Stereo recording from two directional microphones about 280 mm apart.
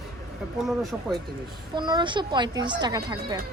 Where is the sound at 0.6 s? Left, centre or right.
Centre.